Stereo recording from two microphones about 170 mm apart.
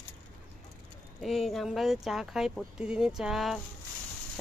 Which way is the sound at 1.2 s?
Centre (ahead or behind).